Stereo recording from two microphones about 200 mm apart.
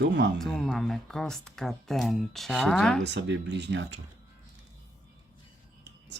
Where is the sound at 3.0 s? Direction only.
60° right (ahead or behind).